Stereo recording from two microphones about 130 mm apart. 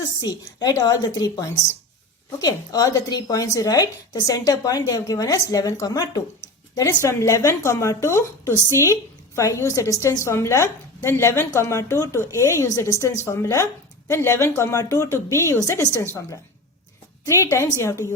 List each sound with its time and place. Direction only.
0.0 s a woman's voice: 30° left (ahead or behind)
17.2 s a woman's voice: 25° left (ahead or behind)